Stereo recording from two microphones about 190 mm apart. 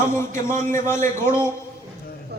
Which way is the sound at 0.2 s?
15° left (ahead or behind).